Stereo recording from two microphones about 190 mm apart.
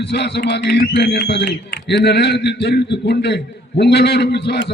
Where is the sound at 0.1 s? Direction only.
65° left (ahead or behind).